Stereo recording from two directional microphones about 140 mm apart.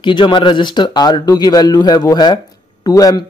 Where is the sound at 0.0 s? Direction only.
35° left (ahead or behind).